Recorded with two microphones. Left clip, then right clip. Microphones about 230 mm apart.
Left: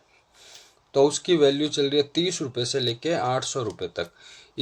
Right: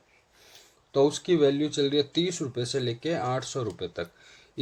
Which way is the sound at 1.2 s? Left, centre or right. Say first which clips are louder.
Left 3 dB; left.